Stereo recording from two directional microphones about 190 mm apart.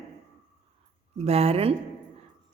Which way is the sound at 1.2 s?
35° right (ahead or behind).